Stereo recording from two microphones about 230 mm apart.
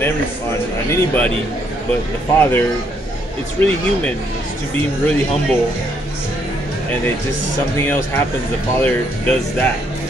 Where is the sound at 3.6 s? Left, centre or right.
Centre.